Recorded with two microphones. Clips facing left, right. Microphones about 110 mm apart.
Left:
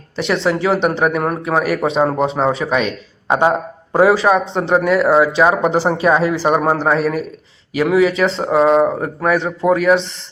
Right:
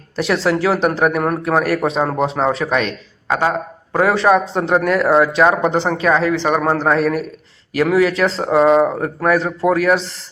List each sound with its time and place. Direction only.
0.2 s a man's voice: centre (ahead or behind)
3.2 s speech: 20° left (ahead or behind)
4.1 s a man's voice: centre (ahead or behind)